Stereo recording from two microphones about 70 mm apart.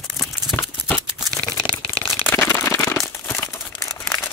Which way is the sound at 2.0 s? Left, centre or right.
Left.